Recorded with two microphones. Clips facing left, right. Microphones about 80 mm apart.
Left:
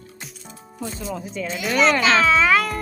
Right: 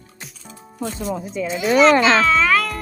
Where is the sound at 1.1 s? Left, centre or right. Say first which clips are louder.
Right 3 dB; centre.